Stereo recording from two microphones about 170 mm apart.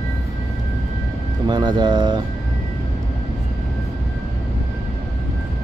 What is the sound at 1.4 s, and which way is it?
Speech, 25° right (ahead or behind).